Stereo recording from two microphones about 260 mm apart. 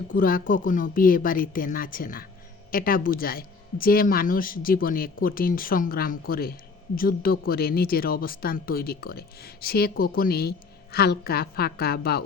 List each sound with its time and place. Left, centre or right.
0.1 s speech: left